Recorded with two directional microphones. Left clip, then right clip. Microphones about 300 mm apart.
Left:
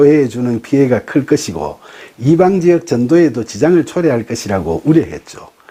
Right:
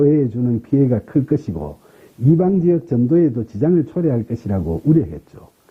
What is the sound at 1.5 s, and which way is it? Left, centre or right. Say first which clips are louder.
Speech: left 8 dB; left.